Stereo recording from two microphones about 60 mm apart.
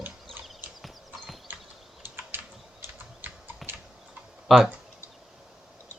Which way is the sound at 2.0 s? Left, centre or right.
Right.